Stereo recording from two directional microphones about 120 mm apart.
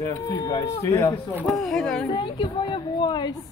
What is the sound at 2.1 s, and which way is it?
Speech, 40° left (ahead or behind).